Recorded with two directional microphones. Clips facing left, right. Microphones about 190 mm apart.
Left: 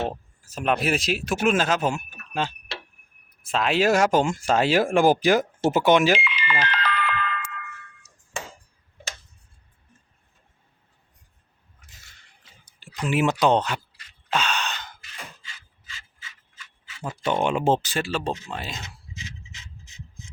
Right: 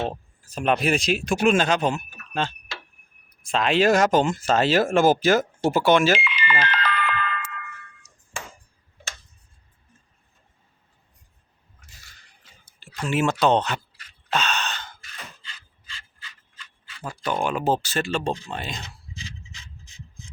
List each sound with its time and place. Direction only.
0.0 s speech: 5° left (ahead or behind)
6.1 s music: 50° right (ahead or behind)
11.9 s a sound: 20° left (ahead or behind)
13.1 s speech: 15° left (ahead or behind)
14.3 s sigh: 10° left (ahead or behind)
17.0 s speech: 25° left (ahead or behind)
17.9 s speech: 5° left (ahead or behind)